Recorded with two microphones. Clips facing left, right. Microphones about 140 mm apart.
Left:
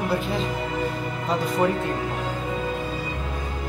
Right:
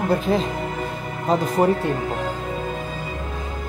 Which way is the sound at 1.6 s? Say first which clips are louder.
Right 4 dB; 35° right (ahead or behind).